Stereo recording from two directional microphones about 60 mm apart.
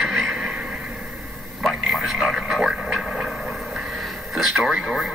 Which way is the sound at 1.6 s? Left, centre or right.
Centre.